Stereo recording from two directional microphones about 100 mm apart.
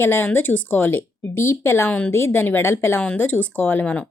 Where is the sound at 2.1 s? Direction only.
25° left (ahead or behind).